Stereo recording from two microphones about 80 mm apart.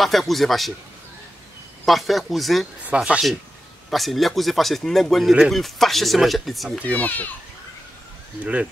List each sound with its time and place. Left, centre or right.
0.0 s speech: centre
1.9 s speech: centre
6.9 s a child's voice: left